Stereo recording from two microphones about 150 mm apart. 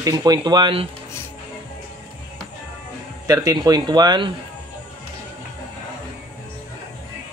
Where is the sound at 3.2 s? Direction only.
25° right (ahead or behind).